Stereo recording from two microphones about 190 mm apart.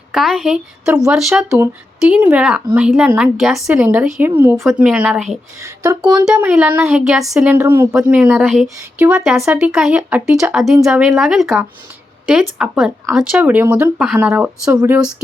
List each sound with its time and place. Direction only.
0.1 s speech: centre (ahead or behind)
5.6 s speech: 15° right (ahead or behind)